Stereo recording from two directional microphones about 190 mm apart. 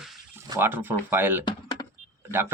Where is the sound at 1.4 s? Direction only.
25° left (ahead or behind).